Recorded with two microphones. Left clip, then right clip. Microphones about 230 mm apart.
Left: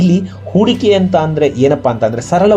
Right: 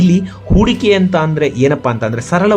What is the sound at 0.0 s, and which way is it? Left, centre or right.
Speech, centre.